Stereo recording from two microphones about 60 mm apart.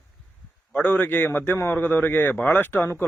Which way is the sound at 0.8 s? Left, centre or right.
Left.